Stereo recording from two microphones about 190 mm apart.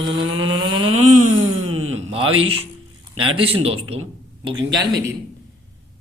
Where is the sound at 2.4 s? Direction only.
30° right (ahead or behind).